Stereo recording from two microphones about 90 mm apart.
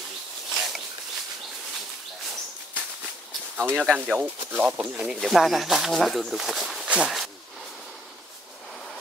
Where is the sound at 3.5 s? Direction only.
25° right (ahead or behind).